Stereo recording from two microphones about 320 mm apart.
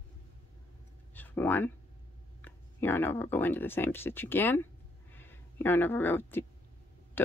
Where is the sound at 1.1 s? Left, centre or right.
Centre.